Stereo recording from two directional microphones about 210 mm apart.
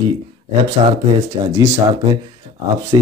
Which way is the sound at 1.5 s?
15° right (ahead or behind).